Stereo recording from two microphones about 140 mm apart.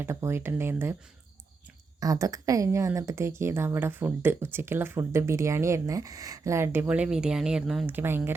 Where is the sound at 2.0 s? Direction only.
25° right (ahead or behind); by 7.8 s 5° right (ahead or behind).